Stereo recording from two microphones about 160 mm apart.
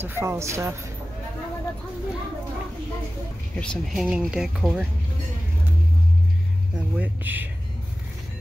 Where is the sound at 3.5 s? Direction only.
5° left (ahead or behind).